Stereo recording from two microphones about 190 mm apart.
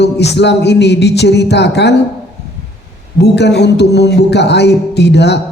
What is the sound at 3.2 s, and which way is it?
A man's voice, 65° left (ahead or behind).